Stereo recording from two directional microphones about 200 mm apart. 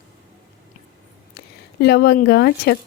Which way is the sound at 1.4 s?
55° left (ahead or behind).